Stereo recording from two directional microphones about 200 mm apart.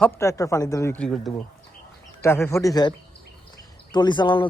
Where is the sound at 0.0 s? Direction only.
15° left (ahead or behind).